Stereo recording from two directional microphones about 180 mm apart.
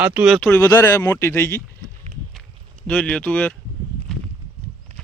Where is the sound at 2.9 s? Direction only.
5° left (ahead or behind).